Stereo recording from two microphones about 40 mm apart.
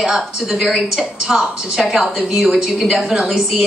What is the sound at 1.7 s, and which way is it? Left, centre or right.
A woman's voice, centre.